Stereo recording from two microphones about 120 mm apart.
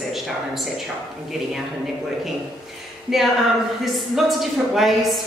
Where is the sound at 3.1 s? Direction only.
5° right (ahead or behind).